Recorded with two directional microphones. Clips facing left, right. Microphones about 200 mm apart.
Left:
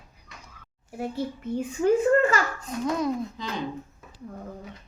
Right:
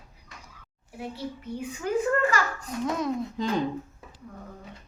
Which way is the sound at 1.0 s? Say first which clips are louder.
Left 5 dB; 50° left (ahead or behind).